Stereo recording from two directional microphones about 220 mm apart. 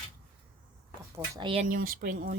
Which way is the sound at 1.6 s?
40° right (ahead or behind).